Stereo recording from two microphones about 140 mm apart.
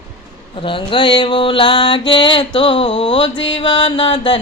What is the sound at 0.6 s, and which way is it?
Mantra, 35° left (ahead or behind).